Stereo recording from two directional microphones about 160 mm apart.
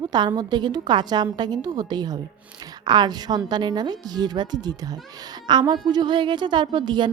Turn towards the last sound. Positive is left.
turn(degrees=-30)  # may be behind; listen again after turning